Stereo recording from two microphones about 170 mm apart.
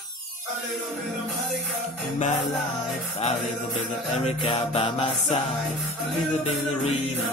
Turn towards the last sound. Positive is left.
turn(degrees=35)  # may be behind; listen again after turning